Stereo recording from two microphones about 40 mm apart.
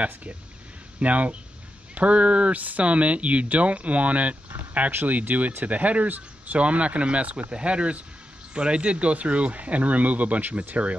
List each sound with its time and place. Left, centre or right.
0.0 s speech: right